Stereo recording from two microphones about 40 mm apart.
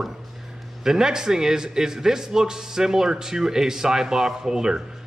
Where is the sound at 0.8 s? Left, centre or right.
Centre.